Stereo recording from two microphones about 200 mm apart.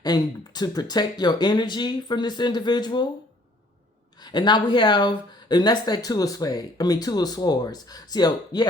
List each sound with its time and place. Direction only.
0.0 s speech: 20° left (ahead or behind)
4.2 s speech: 20° left (ahead or behind)